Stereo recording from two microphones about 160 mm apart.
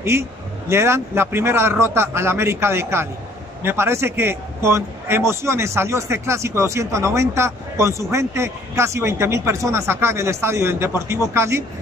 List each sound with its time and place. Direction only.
0.1 s a man's voice: 15° right (ahead or behind)